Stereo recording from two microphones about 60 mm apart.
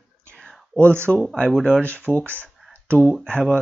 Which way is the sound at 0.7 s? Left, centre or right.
Centre.